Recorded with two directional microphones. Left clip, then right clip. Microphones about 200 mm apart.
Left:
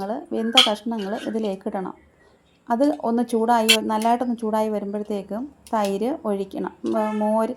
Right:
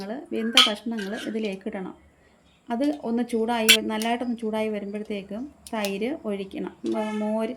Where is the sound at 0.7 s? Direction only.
20° left (ahead or behind).